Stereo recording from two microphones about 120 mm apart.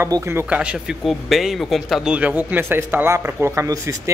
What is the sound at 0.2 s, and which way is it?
Speech, 20° right (ahead or behind).